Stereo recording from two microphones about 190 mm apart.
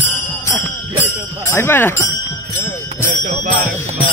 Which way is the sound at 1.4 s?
10° left (ahead or behind).